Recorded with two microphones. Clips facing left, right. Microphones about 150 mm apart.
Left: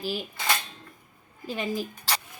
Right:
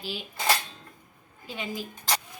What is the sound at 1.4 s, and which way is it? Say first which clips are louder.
Speech: left 5 dB; 40° left (ahead or behind).